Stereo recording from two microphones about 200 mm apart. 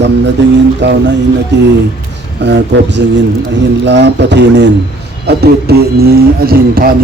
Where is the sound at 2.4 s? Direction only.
60° right (ahead or behind).